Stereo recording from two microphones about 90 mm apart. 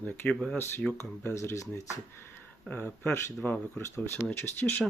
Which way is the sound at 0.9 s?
30° left (ahead or behind).